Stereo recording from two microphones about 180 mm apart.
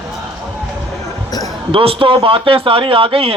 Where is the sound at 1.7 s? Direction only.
30° right (ahead or behind).